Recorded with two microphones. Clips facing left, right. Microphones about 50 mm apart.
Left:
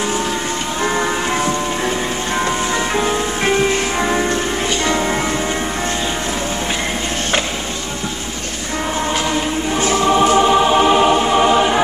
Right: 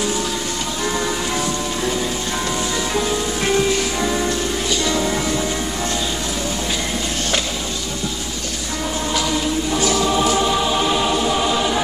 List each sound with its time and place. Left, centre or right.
3.0 s music: left
9.1 s choir: left